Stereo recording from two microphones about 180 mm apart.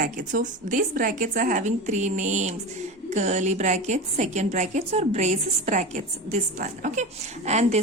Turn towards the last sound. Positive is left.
turn(degrees=-40)  # may be behind; listen again after turning